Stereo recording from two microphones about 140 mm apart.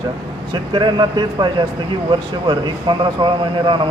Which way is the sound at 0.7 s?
35° right (ahead or behind).